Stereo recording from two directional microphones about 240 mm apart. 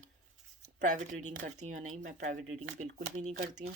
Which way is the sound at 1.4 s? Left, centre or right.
Right.